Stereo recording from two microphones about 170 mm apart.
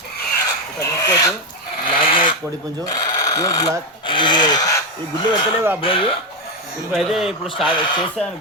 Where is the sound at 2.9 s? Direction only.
20° left (ahead or behind).